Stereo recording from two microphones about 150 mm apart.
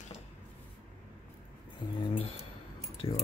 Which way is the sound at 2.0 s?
35° left (ahead or behind).